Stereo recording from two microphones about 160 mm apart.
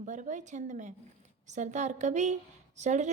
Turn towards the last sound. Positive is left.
turn(degrees=-45)  # may be behind; listen again after turning